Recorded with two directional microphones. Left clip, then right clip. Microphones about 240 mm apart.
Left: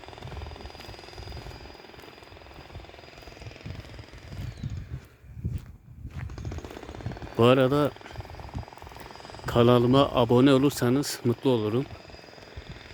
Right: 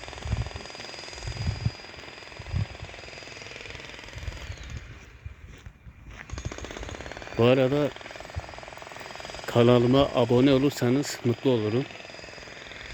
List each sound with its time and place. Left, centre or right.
0.3 s helicopter: right
6.6 s jackhammer: right
7.3 s speech: centre
9.0 s a sound: right
9.5 s speech: centre